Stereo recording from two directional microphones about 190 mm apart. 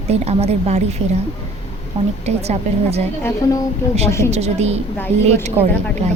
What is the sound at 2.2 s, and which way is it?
Speech, 35° right (ahead or behind).